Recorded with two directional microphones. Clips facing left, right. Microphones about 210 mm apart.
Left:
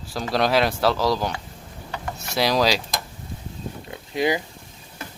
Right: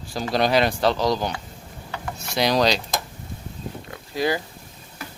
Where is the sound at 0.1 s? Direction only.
Centre (ahead or behind).